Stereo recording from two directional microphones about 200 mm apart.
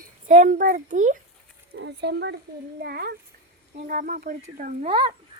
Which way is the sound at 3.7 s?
40° right (ahead or behind).